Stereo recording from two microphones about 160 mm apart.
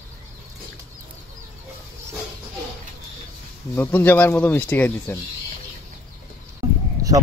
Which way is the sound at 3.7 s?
10° left (ahead or behind).